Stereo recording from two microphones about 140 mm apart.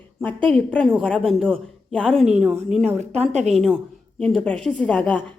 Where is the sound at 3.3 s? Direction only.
55° right (ahead or behind).